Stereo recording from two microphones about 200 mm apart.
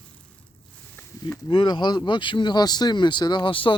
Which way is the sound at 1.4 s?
25° left (ahead or behind).